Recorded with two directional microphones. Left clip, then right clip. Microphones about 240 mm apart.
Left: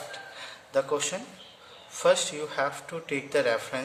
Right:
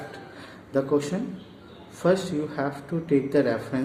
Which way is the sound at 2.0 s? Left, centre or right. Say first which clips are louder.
Even; left.